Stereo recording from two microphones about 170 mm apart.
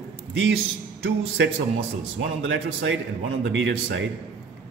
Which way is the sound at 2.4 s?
90° right.